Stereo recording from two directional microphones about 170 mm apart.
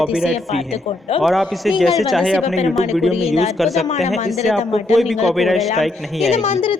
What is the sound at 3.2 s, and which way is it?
Speech, 35° left (ahead or behind).